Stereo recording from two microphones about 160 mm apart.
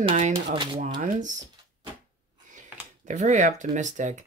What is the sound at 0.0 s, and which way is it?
Speech, 50° right (ahead or behind).